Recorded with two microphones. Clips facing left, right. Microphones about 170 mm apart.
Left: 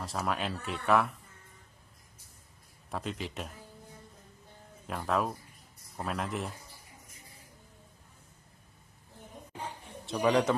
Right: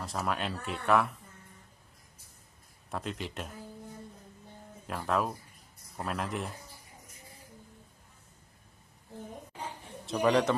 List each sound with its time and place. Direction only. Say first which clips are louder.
0.0 s speech: even; centre (ahead or behind)
2.9 s speech: even; centre (ahead or behind)
4.8 s speech: even; centre (ahead or behind)
10.0 s a man's voice: right 1 dB; centre (ahead or behind)